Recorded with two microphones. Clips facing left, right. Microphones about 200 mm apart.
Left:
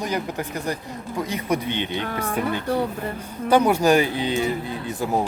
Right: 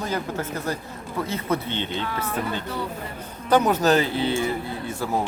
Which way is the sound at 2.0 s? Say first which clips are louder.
Left 2 dB; 50° left (ahead or behind).